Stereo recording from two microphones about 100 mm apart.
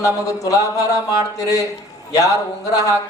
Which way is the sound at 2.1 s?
35° left (ahead or behind).